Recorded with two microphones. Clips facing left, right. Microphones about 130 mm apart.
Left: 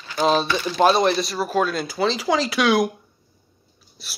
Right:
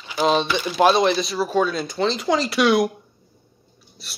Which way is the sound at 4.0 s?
Centre (ahead or behind).